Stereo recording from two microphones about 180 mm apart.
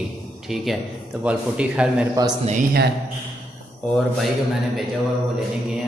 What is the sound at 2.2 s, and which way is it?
Speech, 20° right (ahead or behind).